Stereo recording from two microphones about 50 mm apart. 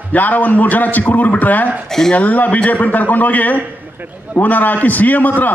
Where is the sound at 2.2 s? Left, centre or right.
Left.